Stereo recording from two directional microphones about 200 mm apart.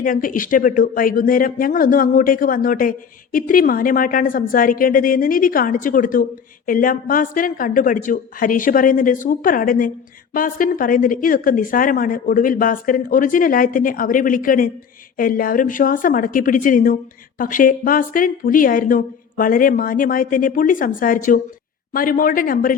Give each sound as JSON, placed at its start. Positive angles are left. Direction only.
{"t": 0.0, "sound": "a woman's voice", "side_deg": 45}